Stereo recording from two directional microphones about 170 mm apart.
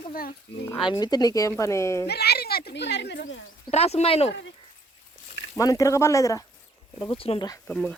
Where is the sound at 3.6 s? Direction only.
40° left (ahead or behind).